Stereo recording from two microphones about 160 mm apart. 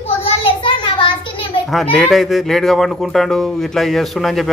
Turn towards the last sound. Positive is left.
turn(degrees=0)  # may be behind; listen again after turning